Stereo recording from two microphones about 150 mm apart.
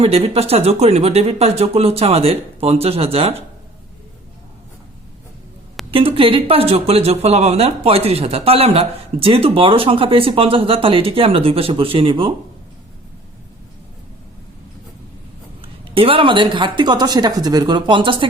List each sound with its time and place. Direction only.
0.0 s speech: 40° right (ahead or behind)
5.9 s speech: 35° right (ahead or behind)
15.6 s speech: 35° right (ahead or behind)